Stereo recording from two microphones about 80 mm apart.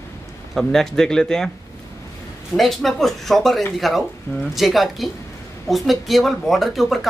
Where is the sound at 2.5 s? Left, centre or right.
Centre.